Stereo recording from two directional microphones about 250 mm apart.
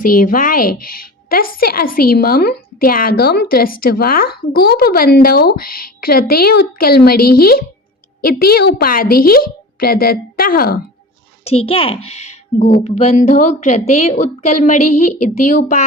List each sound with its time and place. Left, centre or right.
0.0 s a woman's voice: left
11.4 s a woman's voice: left